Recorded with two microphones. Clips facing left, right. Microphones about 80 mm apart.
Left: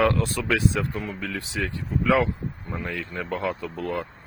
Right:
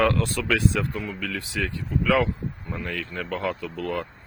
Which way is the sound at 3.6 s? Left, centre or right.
Left.